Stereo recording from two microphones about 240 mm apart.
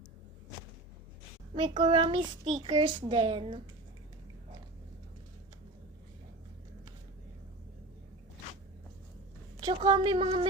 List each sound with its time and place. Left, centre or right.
1.5 s a child's voice: centre
9.6 s a child's voice: centre